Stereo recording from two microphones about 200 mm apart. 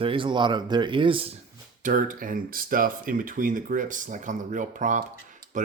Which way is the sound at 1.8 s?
40° right (ahead or behind).